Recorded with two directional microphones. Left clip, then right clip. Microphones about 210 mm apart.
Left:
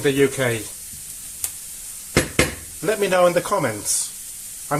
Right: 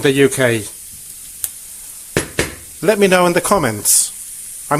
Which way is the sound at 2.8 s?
50° right (ahead or behind).